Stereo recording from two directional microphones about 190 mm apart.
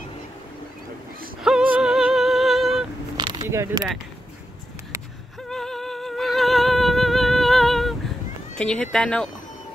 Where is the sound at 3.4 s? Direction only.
15° right (ahead or behind).